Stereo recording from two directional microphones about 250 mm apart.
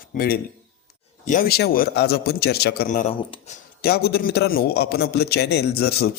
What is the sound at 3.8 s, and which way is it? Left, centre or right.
A man's voice, left.